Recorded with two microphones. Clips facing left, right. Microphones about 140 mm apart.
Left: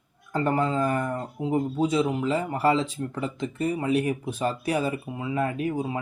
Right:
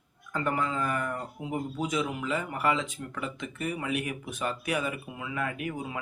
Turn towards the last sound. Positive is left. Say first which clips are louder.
# left 7 dB
turn(degrees=30)  # may be behind; listen again after turning